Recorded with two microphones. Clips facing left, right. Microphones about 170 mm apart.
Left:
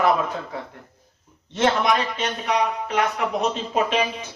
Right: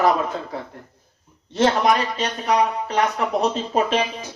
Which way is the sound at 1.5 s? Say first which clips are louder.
Right 2 dB; 35° right (ahead or behind).